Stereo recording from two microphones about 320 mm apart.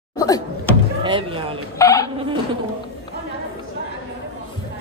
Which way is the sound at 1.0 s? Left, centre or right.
Centre.